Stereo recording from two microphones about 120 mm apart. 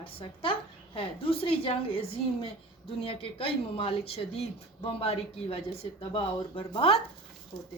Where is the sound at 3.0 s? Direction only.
50° left (ahead or behind).